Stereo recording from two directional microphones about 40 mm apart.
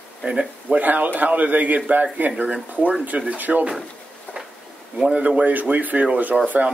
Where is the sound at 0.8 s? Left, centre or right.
Right.